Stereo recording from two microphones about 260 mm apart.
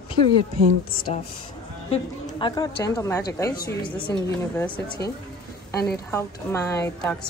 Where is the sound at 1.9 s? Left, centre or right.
Centre.